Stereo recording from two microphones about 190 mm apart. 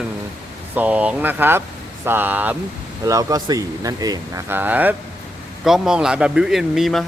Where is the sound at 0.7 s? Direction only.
10° right (ahead or behind).